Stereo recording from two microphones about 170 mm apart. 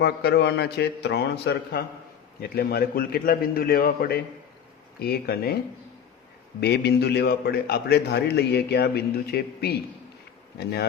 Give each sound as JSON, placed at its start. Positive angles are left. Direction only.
{"t": 0.0, "sound": "a man's voice", "side_deg": 70}
{"t": 2.4, "sound": "a man's voice", "side_deg": 65}
{"t": 6.6, "sound": "a man's voice", "side_deg": 75}